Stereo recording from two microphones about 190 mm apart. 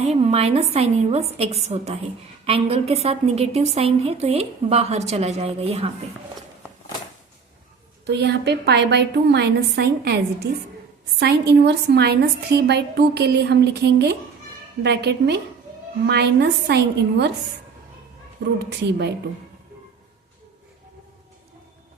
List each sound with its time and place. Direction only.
0.0 s a woman's voice: 35° right (ahead or behind)
8.0 s a woman's voice: 65° right (ahead or behind)
18.6 s a woman's voice: 65° right (ahead or behind)